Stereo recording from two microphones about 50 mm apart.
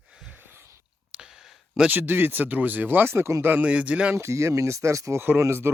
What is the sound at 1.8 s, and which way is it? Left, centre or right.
Speech, right.